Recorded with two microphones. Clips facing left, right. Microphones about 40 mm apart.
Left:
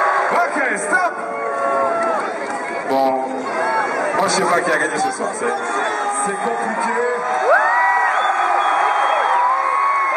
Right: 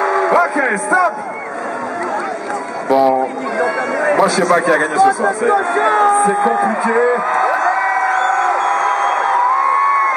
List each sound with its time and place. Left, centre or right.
0.0 s music: centre
2.9 s a sound: centre
4.4 s a man's voice: centre
5.5 s speech: centre
6.0 s a man's voice: centre
7.5 s crowd: centre
8.1 s a sound: centre